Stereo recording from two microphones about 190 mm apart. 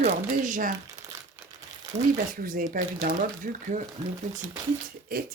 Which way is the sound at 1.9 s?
40° right (ahead or behind).